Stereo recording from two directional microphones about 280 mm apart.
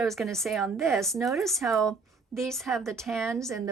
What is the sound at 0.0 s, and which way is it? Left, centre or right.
Speech, centre.